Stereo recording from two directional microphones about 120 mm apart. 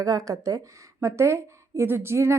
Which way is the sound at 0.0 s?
30° right (ahead or behind).